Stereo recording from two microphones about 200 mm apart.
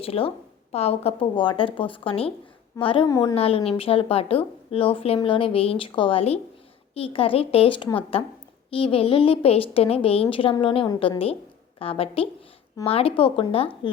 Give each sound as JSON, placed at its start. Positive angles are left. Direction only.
{"t": 0.0, "sound": "a woman's voice", "side_deg": 30}
{"t": 3.3, "sound": "a woman's voice", "side_deg": 30}